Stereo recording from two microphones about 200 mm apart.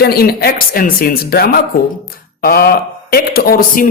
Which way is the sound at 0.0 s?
50° left (ahead or behind).